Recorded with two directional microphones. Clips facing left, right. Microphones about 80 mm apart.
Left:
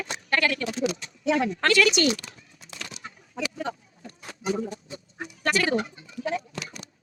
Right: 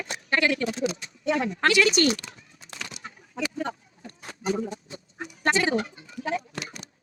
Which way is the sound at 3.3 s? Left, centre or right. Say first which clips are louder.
Right 1 dB; centre.